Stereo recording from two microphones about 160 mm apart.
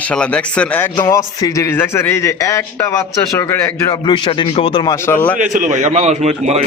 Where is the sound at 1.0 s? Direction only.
20° left (ahead or behind).